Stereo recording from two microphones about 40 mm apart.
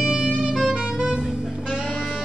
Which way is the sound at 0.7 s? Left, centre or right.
Right.